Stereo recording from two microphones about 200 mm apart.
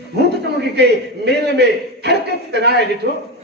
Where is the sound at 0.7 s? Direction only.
55° right (ahead or behind).